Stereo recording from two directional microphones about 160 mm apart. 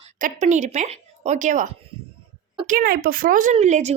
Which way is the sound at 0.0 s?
50° right (ahead or behind).